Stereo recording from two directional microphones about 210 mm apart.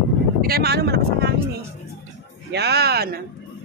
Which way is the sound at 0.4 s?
45° right (ahead or behind).